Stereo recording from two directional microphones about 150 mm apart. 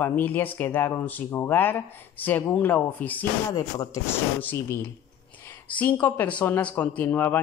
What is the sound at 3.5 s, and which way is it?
A woman's voice, 25° left (ahead or behind).